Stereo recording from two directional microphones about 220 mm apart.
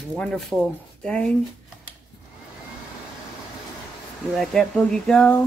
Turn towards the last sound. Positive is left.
turn(degrees=5)  # may be behind; listen again after turning